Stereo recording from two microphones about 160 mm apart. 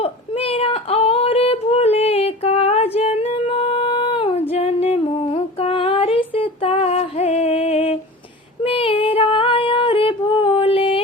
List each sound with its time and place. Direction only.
0.0 s female singing: 40° left (ahead or behind)